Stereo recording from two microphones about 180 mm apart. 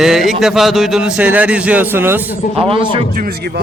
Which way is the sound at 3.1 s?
55° right (ahead or behind).